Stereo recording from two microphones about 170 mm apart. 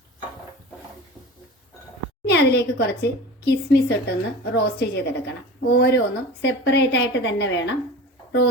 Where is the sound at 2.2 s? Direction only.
75° left (ahead or behind).